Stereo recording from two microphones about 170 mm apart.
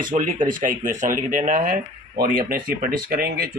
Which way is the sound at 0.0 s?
50° right (ahead or behind).